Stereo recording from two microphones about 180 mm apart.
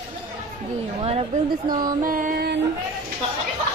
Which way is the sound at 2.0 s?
50° right (ahead or behind).